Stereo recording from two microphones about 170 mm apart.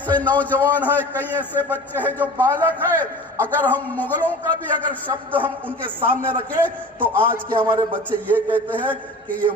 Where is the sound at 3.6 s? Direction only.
10° left (ahead or behind).